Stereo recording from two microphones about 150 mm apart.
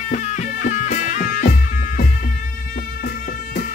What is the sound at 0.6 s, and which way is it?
Music, 55° left (ahead or behind).